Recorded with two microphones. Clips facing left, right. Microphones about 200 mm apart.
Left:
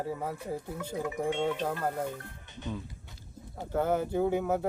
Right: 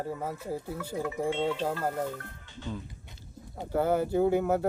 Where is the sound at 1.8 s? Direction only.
5° right (ahead or behind).